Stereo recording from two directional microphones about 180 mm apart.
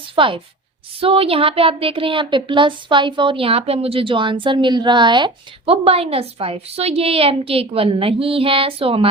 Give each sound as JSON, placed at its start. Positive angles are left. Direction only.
{"t": 0.2, "sound": "a woman's voice", "side_deg": -30}